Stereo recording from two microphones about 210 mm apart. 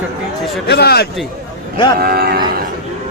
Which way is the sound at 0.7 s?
50° left (ahead or behind).